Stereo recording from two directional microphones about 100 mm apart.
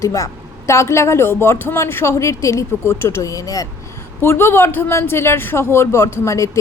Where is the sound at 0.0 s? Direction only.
35° left (ahead or behind).